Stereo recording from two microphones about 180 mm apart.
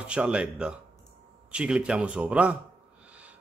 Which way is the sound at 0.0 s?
5° right (ahead or behind).